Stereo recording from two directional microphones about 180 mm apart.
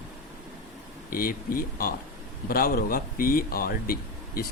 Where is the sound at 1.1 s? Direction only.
55° left (ahead or behind).